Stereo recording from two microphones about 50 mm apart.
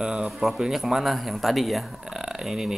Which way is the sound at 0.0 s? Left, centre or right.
Centre.